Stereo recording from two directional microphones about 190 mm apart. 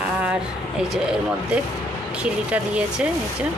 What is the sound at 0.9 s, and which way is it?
A woman's voice, 5° right (ahead or behind).